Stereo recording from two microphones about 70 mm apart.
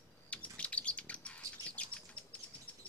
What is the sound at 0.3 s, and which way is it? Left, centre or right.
Bird, centre.